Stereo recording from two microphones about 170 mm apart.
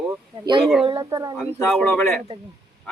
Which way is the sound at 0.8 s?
25° right (ahead or behind).